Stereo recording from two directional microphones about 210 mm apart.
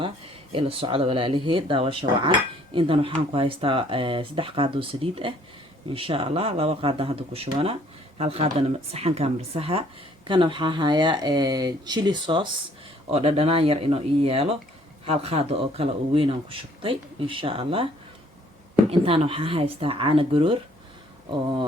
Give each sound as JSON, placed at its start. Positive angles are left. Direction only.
{"t": 0.5, "sound": "speech", "side_deg": -25}
{"t": 18.9, "sound": "speech", "side_deg": -25}